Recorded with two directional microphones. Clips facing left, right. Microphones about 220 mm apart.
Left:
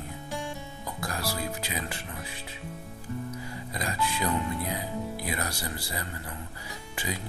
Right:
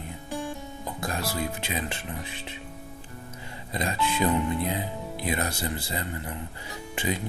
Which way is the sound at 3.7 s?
25° right (ahead or behind).